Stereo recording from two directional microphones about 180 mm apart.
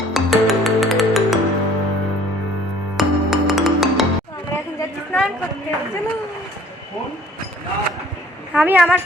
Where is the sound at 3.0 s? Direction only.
Centre (ahead or behind).